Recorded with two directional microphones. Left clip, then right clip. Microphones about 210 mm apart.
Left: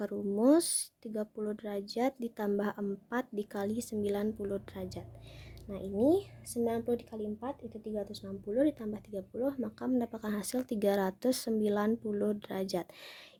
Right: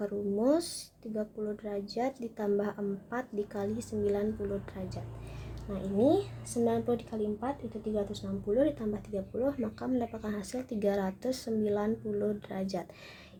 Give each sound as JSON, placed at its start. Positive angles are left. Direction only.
{"t": 0.0, "sound": "speech", "side_deg": 45}